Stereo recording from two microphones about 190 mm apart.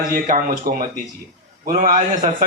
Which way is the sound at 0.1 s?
45° right (ahead or behind).